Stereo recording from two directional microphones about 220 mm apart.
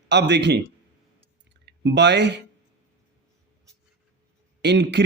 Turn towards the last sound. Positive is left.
turn(degrees=-50)  # may be behind; listen again after turning